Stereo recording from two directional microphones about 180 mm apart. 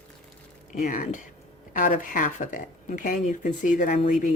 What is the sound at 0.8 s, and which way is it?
Speech, 45° left (ahead or behind).